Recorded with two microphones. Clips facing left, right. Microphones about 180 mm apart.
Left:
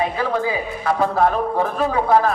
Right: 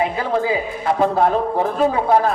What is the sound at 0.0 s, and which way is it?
A man's voice, 25° right (ahead or behind).